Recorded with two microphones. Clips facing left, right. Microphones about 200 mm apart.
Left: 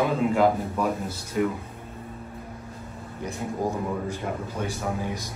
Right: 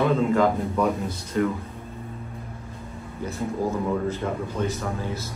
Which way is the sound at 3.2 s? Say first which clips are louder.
Right 2 dB; 15° left (ahead or behind).